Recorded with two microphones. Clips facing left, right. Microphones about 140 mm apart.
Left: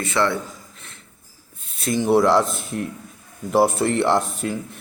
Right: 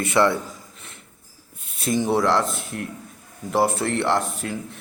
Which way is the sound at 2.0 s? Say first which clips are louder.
Left 6 dB; 10° left (ahead or behind).